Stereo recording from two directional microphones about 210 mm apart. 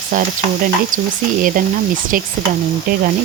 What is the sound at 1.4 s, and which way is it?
Speech, 40° right (ahead or behind).